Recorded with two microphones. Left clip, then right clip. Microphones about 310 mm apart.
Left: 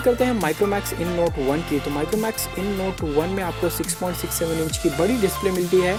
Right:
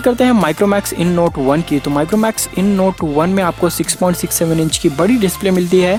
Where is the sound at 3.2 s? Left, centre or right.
Centre.